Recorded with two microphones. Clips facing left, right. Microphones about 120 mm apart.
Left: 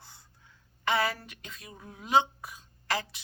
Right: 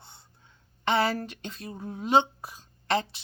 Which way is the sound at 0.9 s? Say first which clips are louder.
Right 4 dB; 30° right (ahead or behind).